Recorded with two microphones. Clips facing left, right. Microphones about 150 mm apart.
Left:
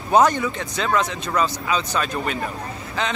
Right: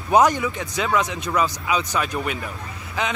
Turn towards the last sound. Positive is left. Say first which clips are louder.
# left 1 dB
turn(degrees=-15)  # may be behind; listen again after turning